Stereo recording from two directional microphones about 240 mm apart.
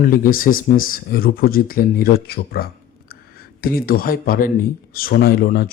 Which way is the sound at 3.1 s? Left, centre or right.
Left.